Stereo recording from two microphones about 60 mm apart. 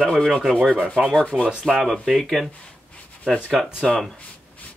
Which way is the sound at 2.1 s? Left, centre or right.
Centre.